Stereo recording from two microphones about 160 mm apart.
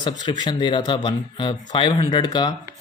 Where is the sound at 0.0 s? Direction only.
25° left (ahead or behind).